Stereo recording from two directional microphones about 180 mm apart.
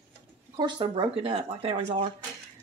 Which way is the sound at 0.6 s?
25° right (ahead or behind).